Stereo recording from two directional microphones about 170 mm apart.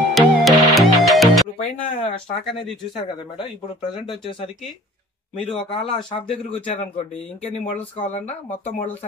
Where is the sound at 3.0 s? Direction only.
30° left (ahead or behind).